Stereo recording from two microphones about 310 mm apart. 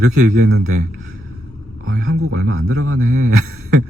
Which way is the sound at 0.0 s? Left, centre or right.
Right.